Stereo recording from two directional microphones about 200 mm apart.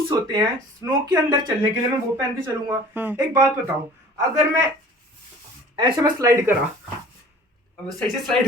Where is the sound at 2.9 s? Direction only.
10° right (ahead or behind).